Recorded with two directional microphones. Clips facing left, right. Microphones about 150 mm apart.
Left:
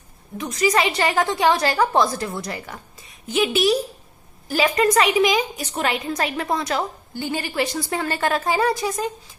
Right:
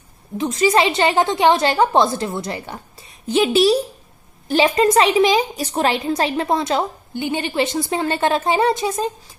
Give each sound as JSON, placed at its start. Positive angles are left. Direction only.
{"t": 0.4, "sound": "a woman's voice", "side_deg": -25}